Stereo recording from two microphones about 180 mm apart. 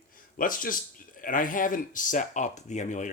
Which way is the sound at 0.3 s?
50° left (ahead or behind).